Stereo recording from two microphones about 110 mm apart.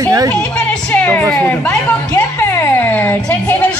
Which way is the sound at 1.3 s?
15° left (ahead or behind).